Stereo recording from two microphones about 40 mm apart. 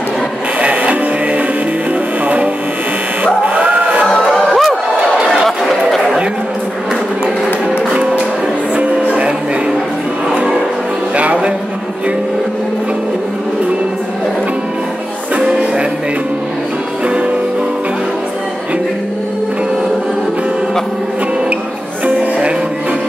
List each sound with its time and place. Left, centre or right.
0.6 s music: right
4.5 s crowd: centre
5.4 s chatter: centre
7.9 s music: right
10.3 s music: right